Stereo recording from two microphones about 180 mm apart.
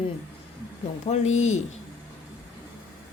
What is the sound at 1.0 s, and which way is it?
Speech, 40° left (ahead or behind).